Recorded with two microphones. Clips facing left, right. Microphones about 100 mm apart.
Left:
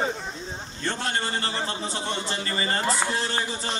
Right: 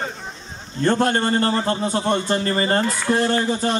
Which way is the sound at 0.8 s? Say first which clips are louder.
Right 10 dB; 50° right (ahead or behind).